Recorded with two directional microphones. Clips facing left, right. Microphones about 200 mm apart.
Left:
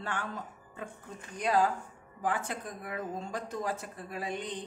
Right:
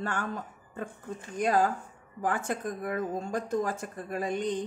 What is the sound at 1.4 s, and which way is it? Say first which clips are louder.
Speech: right 2 dB; 50° right (ahead or behind).